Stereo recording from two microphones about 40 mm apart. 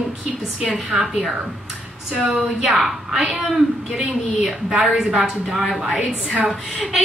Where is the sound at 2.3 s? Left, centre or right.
Centre.